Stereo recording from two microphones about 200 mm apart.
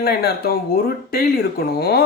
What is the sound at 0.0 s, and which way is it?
Speech, 50° left (ahead or behind).